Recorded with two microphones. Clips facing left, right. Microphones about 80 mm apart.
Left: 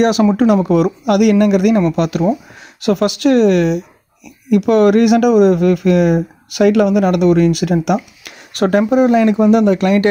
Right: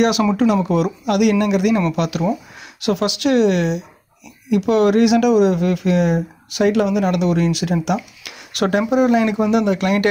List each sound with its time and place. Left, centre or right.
0.0 s speech: left
0.5 s speech: left